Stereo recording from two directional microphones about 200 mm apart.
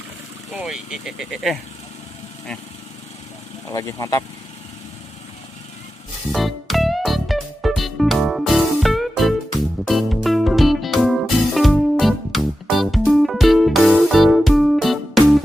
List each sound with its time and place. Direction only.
0.5 s speech: 5° right (ahead or behind)
3.7 s speech: 15° left (ahead or behind)
6.3 s music: centre (ahead or behind)